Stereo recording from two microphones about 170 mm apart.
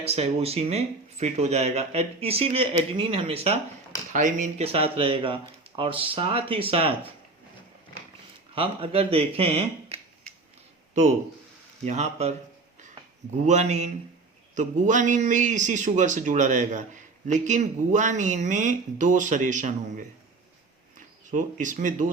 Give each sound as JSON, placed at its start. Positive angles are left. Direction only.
{"t": 0.0, "sound": "speech", "side_deg": -35}
{"t": 4.1, "sound": "speech", "side_deg": -45}
{"t": 8.5, "sound": "speech", "side_deg": -35}
{"t": 11.9, "sound": "speech", "side_deg": -40}
{"t": 13.3, "sound": "a man's voice", "side_deg": -40}
{"t": 21.2, "sound": "a man's voice", "side_deg": -50}